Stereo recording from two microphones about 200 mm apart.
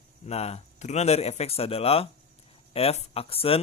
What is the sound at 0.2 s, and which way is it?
Speech, 30° left (ahead or behind).